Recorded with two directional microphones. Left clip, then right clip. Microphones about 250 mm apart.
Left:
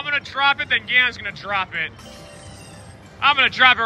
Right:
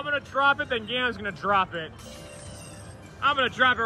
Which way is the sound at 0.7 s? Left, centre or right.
Centre.